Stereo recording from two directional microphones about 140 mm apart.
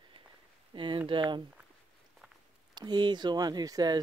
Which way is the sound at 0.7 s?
35° right (ahead or behind).